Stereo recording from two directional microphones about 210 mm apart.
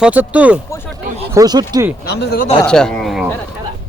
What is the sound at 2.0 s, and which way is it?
Speech, 50° left (ahead or behind).